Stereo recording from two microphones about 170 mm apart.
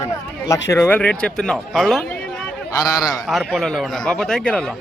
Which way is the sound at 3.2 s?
Centre (ahead or behind).